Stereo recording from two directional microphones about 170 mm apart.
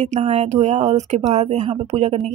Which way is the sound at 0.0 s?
45° right (ahead or behind).